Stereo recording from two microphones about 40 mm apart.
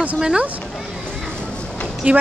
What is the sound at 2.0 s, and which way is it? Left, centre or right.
Speech, right.